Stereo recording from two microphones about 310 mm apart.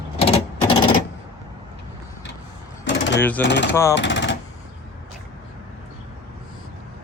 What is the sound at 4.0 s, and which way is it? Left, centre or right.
Machine gun, left.